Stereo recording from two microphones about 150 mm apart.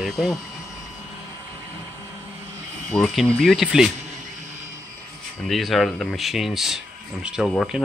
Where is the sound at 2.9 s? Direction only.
5° left (ahead or behind).